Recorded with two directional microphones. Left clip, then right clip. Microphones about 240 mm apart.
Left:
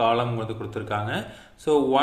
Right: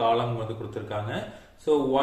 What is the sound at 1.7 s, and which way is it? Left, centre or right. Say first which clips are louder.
Speech: left 2 dB; left.